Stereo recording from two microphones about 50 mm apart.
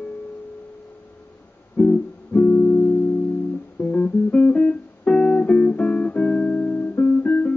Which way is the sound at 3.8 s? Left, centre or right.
Left.